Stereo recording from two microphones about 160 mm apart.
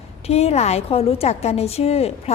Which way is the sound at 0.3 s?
40° left (ahead or behind).